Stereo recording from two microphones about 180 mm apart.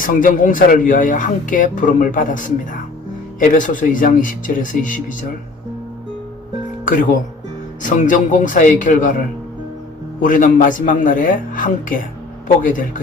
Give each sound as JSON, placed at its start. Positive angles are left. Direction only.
{"t": 0.0, "sound": "speech", "side_deg": 50}
{"t": 3.4, "sound": "speech", "side_deg": 45}
{"t": 6.8, "sound": "speech", "side_deg": 50}
{"t": 10.2, "sound": "speech", "side_deg": 50}